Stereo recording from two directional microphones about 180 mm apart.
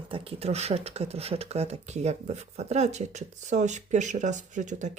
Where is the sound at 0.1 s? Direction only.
35° right (ahead or behind).